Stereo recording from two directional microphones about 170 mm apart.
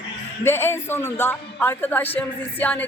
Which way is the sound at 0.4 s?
15° left (ahead or behind).